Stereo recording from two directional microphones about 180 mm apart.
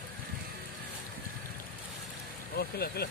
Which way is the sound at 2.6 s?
60° left (ahead or behind).